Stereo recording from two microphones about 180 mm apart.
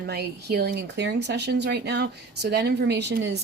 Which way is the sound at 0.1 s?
60° right (ahead or behind).